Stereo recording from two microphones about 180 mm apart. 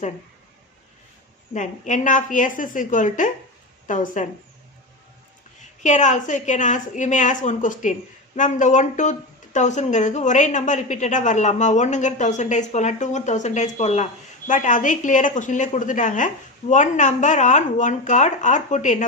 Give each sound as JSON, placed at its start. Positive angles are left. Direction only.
{"t": 1.5, "sound": "speech", "side_deg": 40}
{"t": 5.8, "sound": "speech", "side_deg": 45}